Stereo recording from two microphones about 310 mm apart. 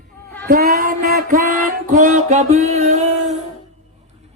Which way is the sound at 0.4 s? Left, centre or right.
Right.